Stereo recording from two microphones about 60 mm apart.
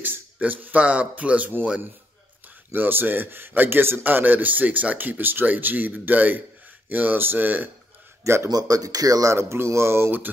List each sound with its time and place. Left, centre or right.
0.0 s speech: right
2.7 s a man's voice: right
8.2 s speech: right
8.5 s speech: right